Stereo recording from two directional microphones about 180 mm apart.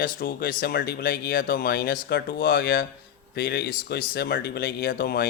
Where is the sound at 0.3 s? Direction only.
60° left (ahead or behind).